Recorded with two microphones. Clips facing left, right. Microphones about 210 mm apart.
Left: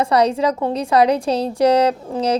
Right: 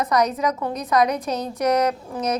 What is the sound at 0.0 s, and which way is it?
A woman's voice, 30° left (ahead or behind).